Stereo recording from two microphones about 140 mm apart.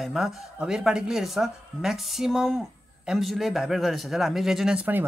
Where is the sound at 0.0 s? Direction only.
Centre (ahead or behind).